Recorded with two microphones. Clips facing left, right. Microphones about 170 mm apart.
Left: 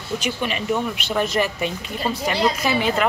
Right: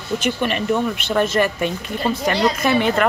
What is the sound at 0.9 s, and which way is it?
Speech, 10° left (ahead or behind).